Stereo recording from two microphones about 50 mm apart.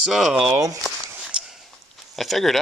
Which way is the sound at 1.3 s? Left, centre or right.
Right.